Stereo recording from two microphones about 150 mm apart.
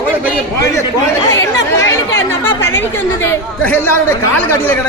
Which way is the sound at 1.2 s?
20° left (ahead or behind).